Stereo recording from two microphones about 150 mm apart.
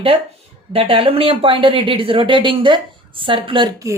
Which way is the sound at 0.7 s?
40° right (ahead or behind).